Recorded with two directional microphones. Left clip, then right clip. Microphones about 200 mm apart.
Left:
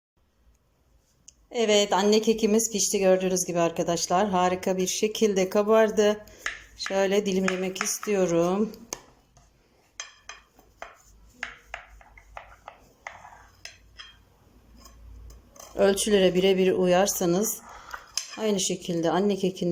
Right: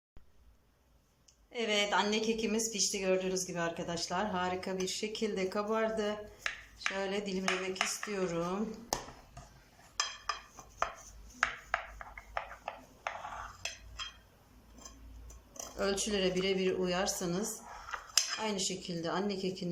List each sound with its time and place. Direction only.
1.3 s a woman's voice: 35° left (ahead or behind)
15.7 s a woman's voice: 40° left (ahead or behind)